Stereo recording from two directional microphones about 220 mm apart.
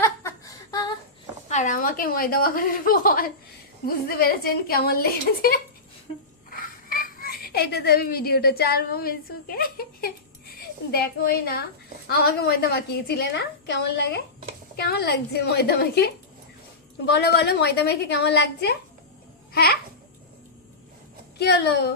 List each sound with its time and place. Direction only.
0.0 s a sound: 10° left (ahead or behind)
1.5 s a woman's voice: 35° left (ahead or behind)
21.3 s a woman's voice: 50° left (ahead or behind)